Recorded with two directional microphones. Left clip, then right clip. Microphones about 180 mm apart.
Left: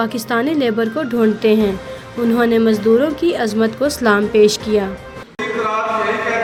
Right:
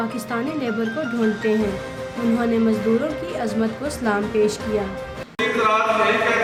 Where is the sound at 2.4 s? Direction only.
40° left (ahead or behind).